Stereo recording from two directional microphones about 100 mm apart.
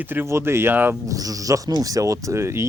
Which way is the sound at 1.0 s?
35° right (ahead or behind).